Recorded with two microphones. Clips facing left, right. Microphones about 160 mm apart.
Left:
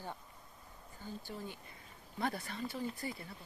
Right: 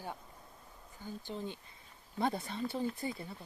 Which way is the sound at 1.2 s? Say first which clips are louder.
Right 4 dB; 20° right (ahead or behind).